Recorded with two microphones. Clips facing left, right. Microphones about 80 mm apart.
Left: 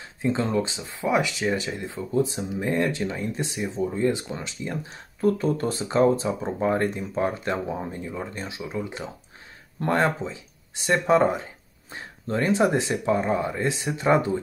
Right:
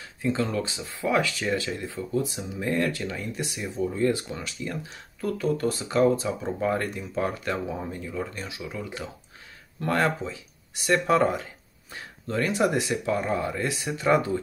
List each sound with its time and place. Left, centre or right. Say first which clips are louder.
0.0 s speech: left 2 dB; left